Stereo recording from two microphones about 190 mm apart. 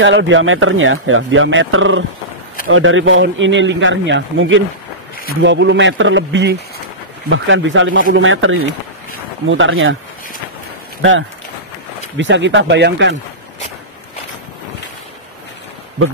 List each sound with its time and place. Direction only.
0.0 s a man's voice: 80° right
7.2 s speech: 85° right
11.0 s speech: 90° right
12.2 s a man's voice: 75° right (ahead or behind)